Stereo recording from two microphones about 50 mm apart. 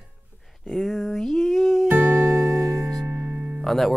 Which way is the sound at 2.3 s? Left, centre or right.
Centre.